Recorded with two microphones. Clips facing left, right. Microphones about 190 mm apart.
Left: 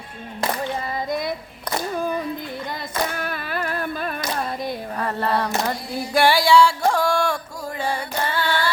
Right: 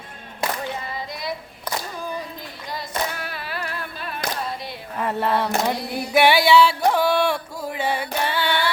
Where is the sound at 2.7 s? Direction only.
50° left (ahead or behind).